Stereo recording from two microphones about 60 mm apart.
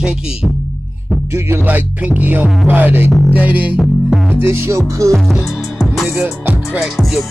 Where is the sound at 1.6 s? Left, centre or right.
Right.